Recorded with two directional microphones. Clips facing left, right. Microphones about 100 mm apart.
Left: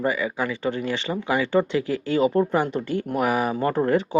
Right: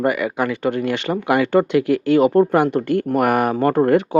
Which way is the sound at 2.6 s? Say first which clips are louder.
Right 7 dB; 60° right (ahead or behind).